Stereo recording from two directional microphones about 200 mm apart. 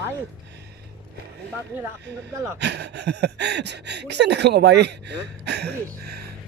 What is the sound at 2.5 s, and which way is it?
Speech, 55° right (ahead or behind).